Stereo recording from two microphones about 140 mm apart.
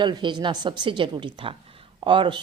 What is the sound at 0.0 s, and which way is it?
A woman's voice, 35° right (ahead or behind).